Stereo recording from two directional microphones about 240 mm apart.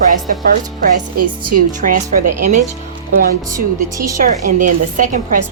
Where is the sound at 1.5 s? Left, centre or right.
Right.